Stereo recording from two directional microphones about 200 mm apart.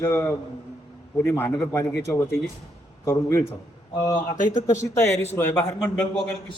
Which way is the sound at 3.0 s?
15° left (ahead or behind).